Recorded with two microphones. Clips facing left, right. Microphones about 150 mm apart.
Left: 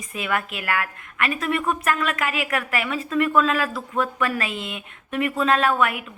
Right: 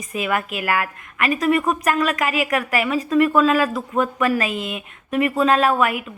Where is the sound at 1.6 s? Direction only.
35° right (ahead or behind).